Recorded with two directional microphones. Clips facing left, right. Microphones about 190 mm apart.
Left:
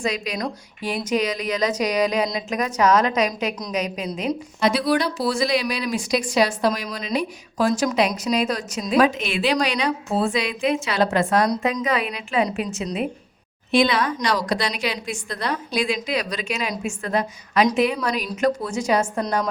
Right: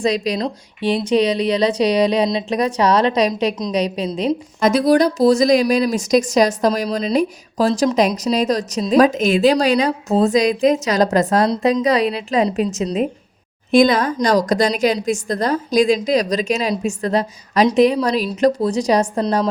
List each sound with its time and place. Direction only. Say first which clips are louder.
0.0 s a woman's voice: right 7 dB; 35° right (ahead or behind)
4.6 s a woman's voice: right 6 dB; 45° right (ahead or behind)